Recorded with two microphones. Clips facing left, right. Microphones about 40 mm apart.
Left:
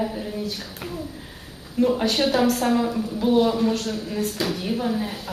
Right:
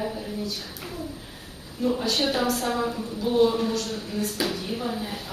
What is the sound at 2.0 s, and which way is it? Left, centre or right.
Speech, left.